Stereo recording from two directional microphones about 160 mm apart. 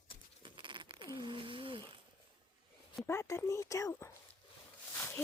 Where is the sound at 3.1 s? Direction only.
15° left (ahead or behind).